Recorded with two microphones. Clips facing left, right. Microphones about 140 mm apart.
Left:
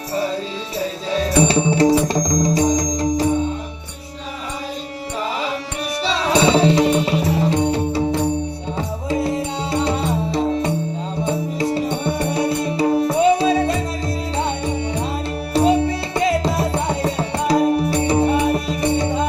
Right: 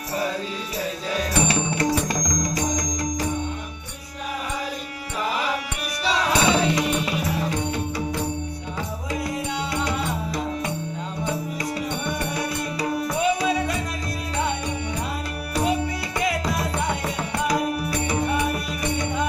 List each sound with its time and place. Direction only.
1.1 s music: 30° left (ahead or behind)
6.1 s music: 30° left (ahead or behind)
9.0 s music: 30° left (ahead or behind)
15.5 s music: 30° left (ahead or behind)